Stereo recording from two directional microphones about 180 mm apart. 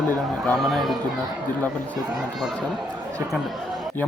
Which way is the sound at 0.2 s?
Centre (ahead or behind).